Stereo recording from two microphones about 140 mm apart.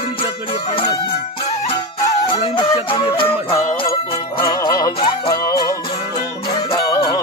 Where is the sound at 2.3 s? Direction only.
35° left (ahead or behind).